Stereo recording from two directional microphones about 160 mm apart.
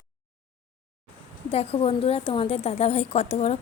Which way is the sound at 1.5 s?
40° left (ahead or behind).